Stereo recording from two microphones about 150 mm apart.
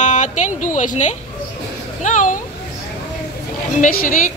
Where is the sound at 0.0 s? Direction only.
50° left (ahead or behind).